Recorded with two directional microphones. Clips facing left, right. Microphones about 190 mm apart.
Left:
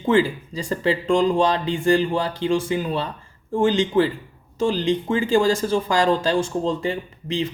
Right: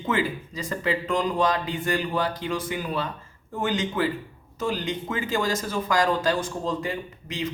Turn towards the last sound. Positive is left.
turn(degrees=30)  # may be behind; listen again after turning